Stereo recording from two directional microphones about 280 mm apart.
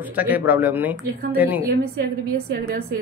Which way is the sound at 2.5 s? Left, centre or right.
Right.